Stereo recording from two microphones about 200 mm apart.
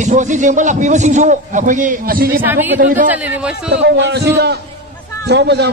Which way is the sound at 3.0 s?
10° right (ahead or behind).